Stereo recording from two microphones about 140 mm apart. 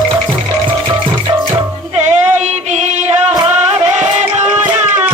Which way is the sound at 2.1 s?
55° right (ahead or behind).